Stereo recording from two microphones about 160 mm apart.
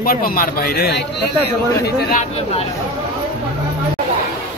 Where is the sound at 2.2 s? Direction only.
40° left (ahead or behind).